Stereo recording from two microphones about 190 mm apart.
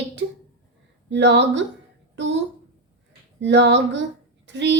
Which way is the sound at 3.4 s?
70° right (ahead or behind).